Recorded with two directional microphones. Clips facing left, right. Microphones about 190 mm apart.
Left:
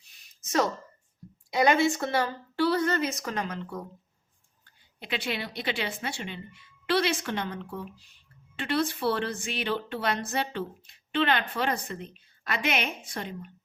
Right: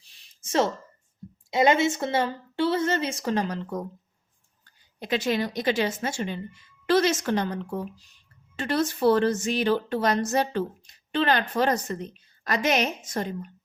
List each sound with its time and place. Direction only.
0.4 s a woman's voice: 25° right (ahead or behind)